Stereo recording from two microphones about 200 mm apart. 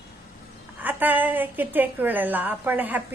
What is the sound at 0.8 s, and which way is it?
A woman's voice, 10° right (ahead or behind).